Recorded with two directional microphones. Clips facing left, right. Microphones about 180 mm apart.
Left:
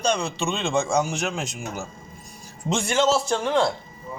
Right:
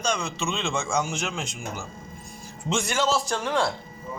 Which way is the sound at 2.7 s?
30° left (ahead or behind).